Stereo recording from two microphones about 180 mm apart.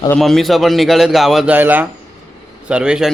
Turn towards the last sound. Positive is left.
turn(degrees=-5)  # may be behind; listen again after turning